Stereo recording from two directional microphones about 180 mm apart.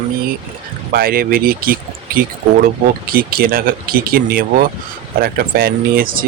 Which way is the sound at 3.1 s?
55° right (ahead or behind).